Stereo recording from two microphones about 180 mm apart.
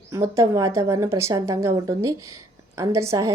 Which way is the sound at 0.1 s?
15° right (ahead or behind).